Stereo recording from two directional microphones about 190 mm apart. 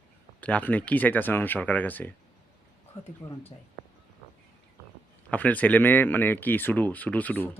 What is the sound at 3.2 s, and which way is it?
Speech, 20° left (ahead or behind).